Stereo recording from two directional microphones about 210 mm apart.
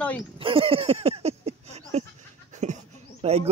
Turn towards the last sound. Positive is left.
turn(degrees=-30)  # may be behind; listen again after turning